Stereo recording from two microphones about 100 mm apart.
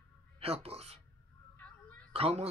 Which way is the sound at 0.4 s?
90° right.